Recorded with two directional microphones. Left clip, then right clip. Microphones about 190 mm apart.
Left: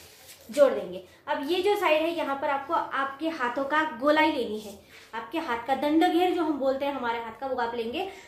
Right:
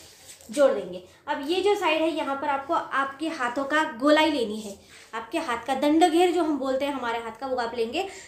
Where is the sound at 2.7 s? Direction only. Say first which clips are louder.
Right 2 dB; 50° right (ahead or behind).